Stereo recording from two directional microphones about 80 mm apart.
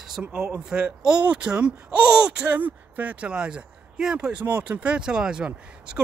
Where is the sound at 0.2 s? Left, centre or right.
Centre.